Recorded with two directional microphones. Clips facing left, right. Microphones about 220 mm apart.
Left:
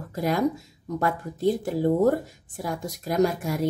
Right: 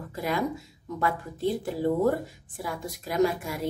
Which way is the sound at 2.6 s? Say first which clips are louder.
Left 5 dB; 45° left (ahead or behind).